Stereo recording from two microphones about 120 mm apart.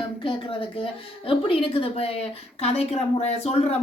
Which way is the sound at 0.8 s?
50° left (ahead or behind).